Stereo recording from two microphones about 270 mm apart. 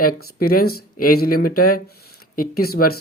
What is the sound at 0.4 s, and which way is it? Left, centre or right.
Speech, left.